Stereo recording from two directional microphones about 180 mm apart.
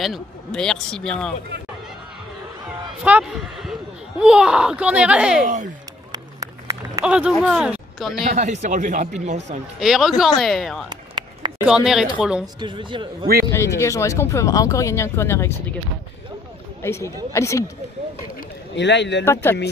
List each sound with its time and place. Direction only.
0.0 s speech: centre (ahead or behind)
3.0 s speech: 5° right (ahead or behind)
6.1 s a sound: 20° right (ahead or behind)
7.1 s speech: 5° right (ahead or behind)
8.2 s a man's voice: 40° right (ahead or behind)
9.8 s speech: centre (ahead or behind)
10.9 s a sound: 25° right (ahead or behind)
11.6 s speech: 5° right (ahead or behind)
12.5 s speech: 25° right (ahead or behind)
13.5 s speech: 15° left (ahead or behind)
16.8 s speech: 15° left (ahead or behind)
18.8 s speech: 75° left (ahead or behind)
19.2 s speech: 15° left (ahead or behind)